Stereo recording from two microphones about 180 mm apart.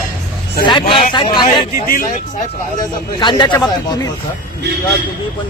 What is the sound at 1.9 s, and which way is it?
Speech, 50° left (ahead or behind).